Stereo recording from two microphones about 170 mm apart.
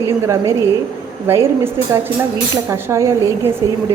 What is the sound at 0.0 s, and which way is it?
A woman's voice, 15° right (ahead or behind).